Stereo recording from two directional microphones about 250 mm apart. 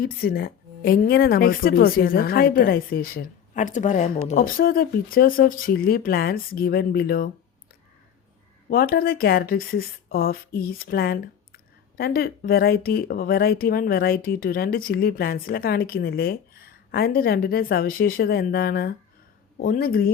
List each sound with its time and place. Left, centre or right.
0.0 s speech: left
8.7 s speech: left